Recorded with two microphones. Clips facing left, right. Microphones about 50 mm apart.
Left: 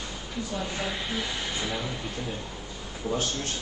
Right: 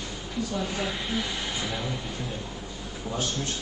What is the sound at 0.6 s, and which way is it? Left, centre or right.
Speech, centre.